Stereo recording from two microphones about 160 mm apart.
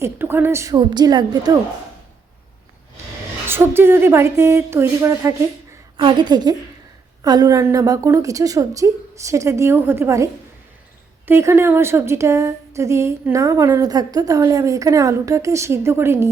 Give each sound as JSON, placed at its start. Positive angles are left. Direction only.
{"t": 0.0, "sound": "a woman's voice", "side_deg": -15}
{"t": 3.5, "sound": "a woman's voice", "side_deg": -15}
{"t": 6.0, "sound": "a woman's voice", "side_deg": -30}
{"t": 11.3, "sound": "a woman's voice", "side_deg": -15}